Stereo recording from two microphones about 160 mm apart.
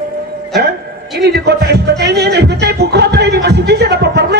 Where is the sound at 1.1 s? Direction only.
90° right.